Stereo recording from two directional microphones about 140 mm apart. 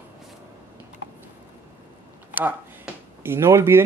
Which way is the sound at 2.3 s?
15° right (ahead or behind).